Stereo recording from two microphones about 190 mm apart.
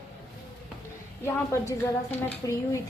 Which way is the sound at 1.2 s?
15° left (ahead or behind).